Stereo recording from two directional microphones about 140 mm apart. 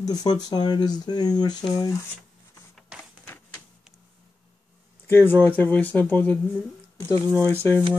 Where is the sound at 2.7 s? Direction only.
Centre (ahead or behind).